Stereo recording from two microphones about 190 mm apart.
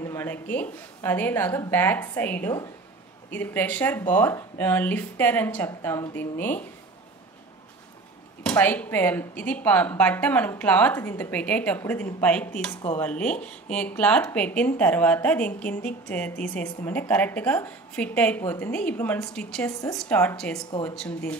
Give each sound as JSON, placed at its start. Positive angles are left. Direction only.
{"t": 0.0, "sound": "speech", "side_deg": 15}
{"t": 8.5, "sound": "speech", "side_deg": 10}